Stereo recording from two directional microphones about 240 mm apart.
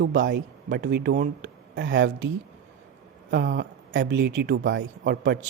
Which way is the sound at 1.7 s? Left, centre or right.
Right.